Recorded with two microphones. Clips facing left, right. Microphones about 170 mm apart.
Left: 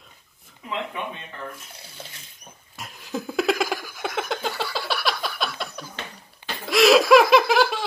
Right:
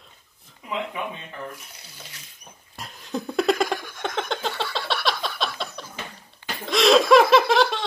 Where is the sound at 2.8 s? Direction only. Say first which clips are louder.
Right 1 dB; centre (ahead or behind).